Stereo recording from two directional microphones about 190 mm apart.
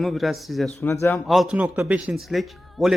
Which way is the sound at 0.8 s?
10° left (ahead or behind).